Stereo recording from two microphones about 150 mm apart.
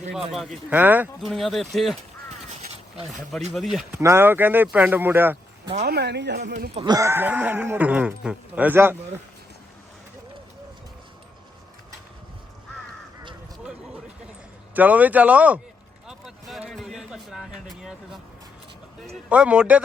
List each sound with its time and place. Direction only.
0.1 s speech: centre (ahead or behind)
0.8 s speech: 10° right (ahead or behind)
1.2 s speech: centre (ahead or behind)
3.1 s speech: centre (ahead or behind)
3.9 s speech: 15° right (ahead or behind)
5.8 s speech: 90° right
6.7 s speech: 25° right (ahead or behind)
14.7 s speech: 10° right (ahead or behind)
16.0 s a sound: 5° right (ahead or behind)
19.3 s speech: 10° right (ahead or behind)